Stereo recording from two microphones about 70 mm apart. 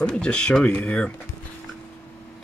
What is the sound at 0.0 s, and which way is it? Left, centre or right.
Speech, centre.